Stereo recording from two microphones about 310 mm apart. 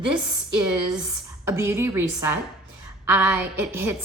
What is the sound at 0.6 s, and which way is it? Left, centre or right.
A woman's voice, centre.